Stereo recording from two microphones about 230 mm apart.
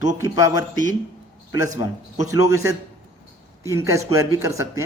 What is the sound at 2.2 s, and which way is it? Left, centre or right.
A man's voice, centre.